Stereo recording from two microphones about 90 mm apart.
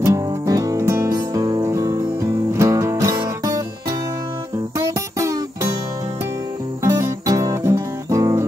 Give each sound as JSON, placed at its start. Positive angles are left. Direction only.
{"t": 0.0, "sound": "music", "side_deg": -35}
{"t": 4.7, "sound": "music", "side_deg": -35}
{"t": 6.8, "sound": "music", "side_deg": -35}